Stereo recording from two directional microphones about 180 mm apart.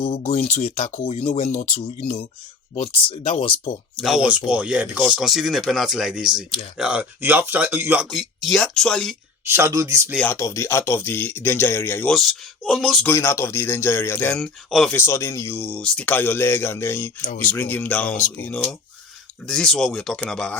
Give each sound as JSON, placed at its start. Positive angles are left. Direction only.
{"t": 0.2, "sound": "speech", "side_deg": 40}
{"t": 3.9, "sound": "speech", "side_deg": 0}
{"t": 9.5, "sound": "speech", "side_deg": -15}
{"t": 10.2, "sound": "speech", "side_deg": 15}
{"t": 17.2, "sound": "speech", "side_deg": 45}
{"t": 17.6, "sound": "speech", "side_deg": 10}